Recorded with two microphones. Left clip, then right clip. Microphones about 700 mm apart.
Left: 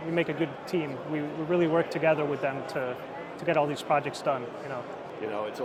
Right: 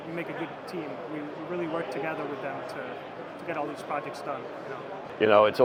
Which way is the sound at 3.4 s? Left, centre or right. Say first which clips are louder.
Left 7 dB; left.